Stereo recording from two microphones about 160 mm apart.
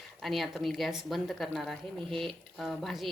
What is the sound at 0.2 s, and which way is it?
Speech, centre (ahead or behind).